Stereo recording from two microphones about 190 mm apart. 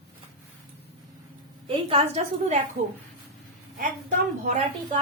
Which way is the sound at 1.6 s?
30° right (ahead or behind).